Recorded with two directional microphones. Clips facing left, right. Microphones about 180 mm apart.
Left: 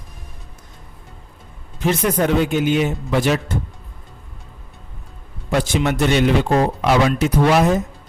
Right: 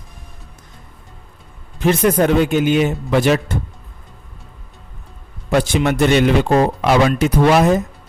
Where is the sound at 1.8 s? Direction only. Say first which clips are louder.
Right 4 dB; 55° right (ahead or behind).